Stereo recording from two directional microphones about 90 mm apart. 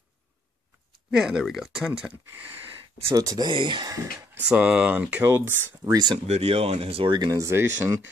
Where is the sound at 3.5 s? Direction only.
60° right (ahead or behind).